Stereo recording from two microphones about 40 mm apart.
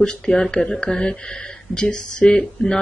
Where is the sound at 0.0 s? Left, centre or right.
Centre.